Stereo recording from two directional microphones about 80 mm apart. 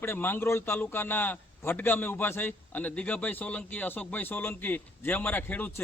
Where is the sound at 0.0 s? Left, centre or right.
Left.